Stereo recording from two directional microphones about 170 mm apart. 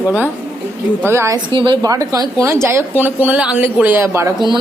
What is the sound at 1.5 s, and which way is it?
Speech, 30° right (ahead or behind).